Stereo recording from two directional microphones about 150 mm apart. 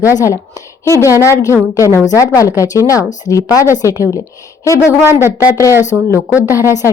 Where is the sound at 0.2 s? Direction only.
20° left (ahead or behind).